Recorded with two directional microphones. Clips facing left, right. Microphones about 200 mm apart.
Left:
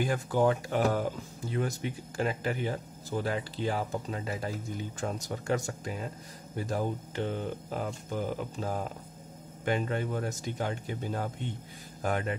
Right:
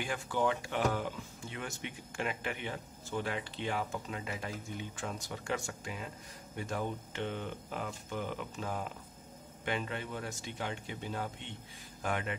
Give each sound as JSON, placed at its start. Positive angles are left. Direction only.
{"t": 0.0, "sound": "speech", "side_deg": 40}